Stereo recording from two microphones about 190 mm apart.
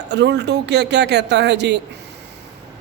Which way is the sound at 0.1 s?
65° right (ahead or behind).